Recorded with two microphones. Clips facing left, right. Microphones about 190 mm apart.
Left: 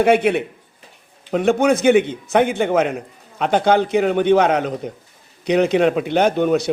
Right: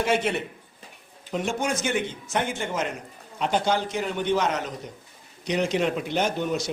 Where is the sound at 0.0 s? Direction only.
60° left (ahead or behind).